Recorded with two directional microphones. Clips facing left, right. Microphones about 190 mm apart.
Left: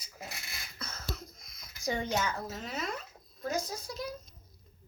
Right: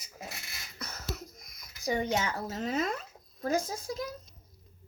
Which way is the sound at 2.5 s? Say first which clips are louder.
Right 8 dB; 40° right (ahead or behind).